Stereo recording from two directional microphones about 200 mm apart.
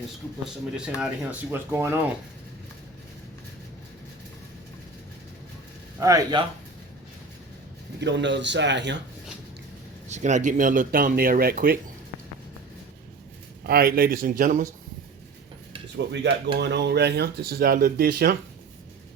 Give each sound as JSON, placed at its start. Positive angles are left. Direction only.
{"t": 0.4, "sound": "speech", "side_deg": -5}
{"t": 6.0, "sound": "speech", "side_deg": -15}
{"t": 8.0, "sound": "speech", "side_deg": -65}
{"t": 10.1, "sound": "speech", "side_deg": -35}
{"t": 13.7, "sound": "speech", "side_deg": -50}
{"t": 16.0, "sound": "speech", "side_deg": -60}